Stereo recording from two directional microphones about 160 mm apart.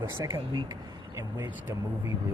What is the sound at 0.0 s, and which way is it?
Speech, 15° right (ahead or behind).